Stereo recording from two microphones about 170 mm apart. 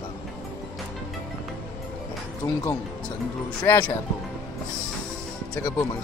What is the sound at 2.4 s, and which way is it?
Speech, 20° left (ahead or behind).